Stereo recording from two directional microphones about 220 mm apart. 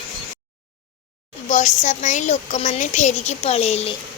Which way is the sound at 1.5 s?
35° left (ahead or behind).